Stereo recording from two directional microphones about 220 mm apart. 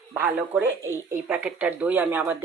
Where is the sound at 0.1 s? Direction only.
10° right (ahead or behind).